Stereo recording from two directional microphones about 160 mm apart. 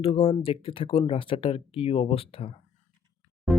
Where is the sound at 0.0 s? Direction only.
35° left (ahead or behind).